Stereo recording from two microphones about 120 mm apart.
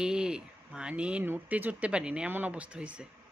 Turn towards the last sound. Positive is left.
turn(degrees=-10)  # may be behind; listen again after turning